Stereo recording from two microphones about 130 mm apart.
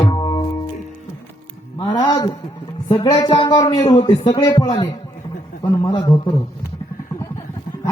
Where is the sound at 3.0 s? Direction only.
40° left (ahead or behind).